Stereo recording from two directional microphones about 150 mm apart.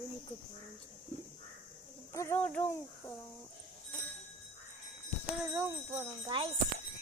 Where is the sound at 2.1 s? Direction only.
20° left (ahead or behind).